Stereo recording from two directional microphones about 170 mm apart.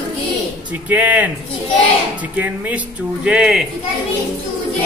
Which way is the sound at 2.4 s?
10° right (ahead or behind).